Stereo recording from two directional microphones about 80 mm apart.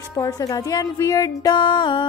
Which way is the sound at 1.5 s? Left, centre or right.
Left.